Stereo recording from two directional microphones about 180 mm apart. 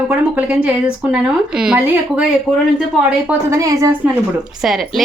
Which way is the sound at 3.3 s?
15° right (ahead or behind).